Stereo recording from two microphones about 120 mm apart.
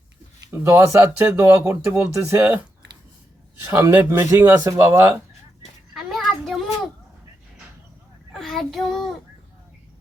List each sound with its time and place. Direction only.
0.5 s speech: 25° right (ahead or behind)
3.7 s speech: 25° right (ahead or behind)
5.9 s a sound: centre (ahead or behind)
8.3 s child singing: centre (ahead or behind)